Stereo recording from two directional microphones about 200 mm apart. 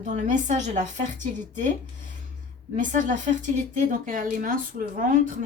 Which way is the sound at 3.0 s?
40° right (ahead or behind).